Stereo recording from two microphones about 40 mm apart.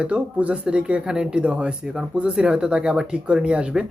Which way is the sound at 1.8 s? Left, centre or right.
Centre.